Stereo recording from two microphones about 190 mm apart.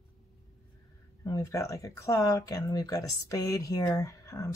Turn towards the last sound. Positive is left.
turn(degrees=15)  # may be behind; listen again after turning